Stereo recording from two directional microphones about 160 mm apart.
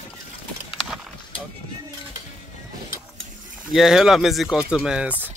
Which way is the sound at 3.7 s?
5° right (ahead or behind).